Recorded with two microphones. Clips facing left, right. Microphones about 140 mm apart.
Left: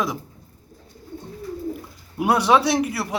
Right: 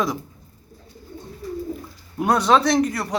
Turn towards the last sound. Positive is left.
turn(degrees=5)  # may be behind; listen again after turning